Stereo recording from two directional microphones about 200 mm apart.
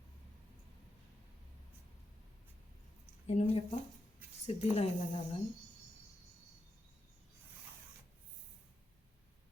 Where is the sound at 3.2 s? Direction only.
30° left (ahead or behind).